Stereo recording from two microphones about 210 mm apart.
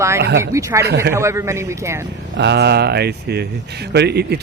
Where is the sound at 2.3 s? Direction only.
55° right (ahead or behind).